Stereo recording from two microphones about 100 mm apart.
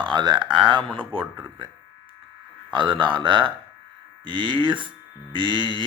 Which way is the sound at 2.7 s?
55° right (ahead or behind).